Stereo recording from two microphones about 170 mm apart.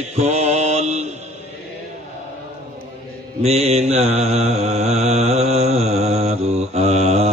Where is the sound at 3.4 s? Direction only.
40° right (ahead or behind).